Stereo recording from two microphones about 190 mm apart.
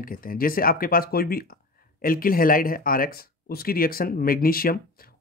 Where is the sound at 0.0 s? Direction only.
50° left (ahead or behind).